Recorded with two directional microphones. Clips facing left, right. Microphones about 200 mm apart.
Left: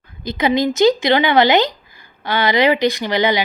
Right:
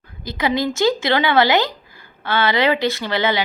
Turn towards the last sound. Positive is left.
turn(degrees=15)  # may be behind; listen again after turning